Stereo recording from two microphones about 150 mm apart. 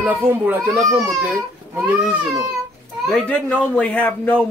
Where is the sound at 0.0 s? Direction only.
10° right (ahead or behind).